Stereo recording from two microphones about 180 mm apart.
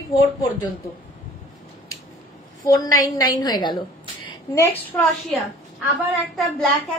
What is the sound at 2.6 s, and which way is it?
A woman's voice, 20° left (ahead or behind).